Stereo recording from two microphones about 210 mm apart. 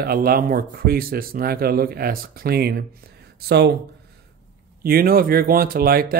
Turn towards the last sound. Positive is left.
turn(degrees=-45)  # may be behind; listen again after turning